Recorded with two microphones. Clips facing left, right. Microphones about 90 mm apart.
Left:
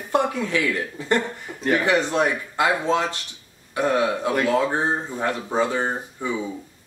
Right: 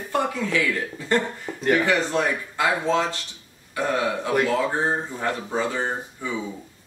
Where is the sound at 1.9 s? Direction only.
20° left (ahead or behind).